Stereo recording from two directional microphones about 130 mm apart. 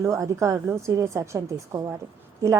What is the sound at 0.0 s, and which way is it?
A woman's voice, 25° right (ahead or behind).